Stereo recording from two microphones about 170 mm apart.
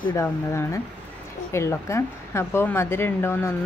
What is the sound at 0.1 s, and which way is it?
Speech, 15° left (ahead or behind).